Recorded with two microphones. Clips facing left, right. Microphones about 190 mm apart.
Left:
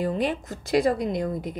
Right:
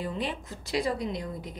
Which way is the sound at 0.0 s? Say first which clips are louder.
Left 7 dB; 45° left (ahead or behind).